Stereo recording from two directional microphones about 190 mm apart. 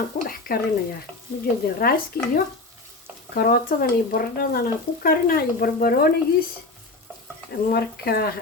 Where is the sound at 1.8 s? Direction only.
50° left (ahead or behind).